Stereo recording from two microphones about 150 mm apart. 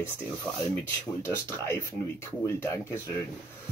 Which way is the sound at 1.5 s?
15° left (ahead or behind).